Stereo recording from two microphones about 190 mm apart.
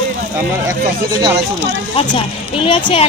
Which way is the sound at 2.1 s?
25° left (ahead or behind).